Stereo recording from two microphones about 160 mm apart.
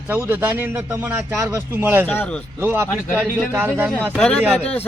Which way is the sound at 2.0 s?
10° left (ahead or behind).